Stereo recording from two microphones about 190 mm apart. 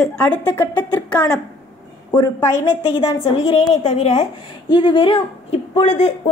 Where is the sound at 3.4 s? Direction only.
30° left (ahead or behind).